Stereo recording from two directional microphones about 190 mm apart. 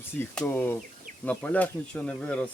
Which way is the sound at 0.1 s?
10° left (ahead or behind).